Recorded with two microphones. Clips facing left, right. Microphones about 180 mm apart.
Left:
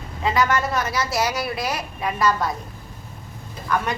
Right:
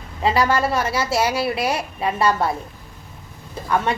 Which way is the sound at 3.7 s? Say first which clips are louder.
Right 3 dB; 25° right (ahead or behind).